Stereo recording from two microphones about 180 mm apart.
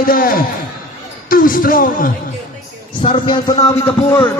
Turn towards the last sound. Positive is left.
turn(degrees=15)  # may be behind; listen again after turning